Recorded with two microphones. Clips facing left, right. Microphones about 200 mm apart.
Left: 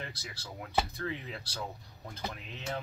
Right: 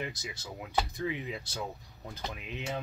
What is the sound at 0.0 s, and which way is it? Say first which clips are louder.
Speech: right 5 dB; 15° right (ahead or behind).